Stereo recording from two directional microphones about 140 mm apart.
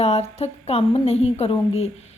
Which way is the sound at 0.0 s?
50° left (ahead or behind).